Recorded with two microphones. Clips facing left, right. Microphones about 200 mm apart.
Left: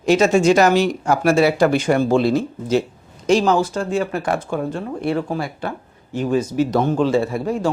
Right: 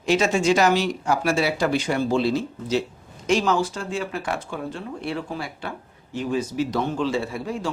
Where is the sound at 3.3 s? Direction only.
35° left (ahead or behind).